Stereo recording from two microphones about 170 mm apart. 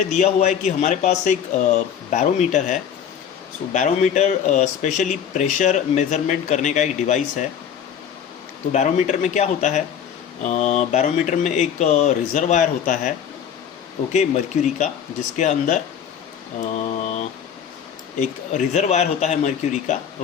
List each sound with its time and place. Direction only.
0.1 s speech: 40° left (ahead or behind)
8.7 s speech: 45° left (ahead or behind)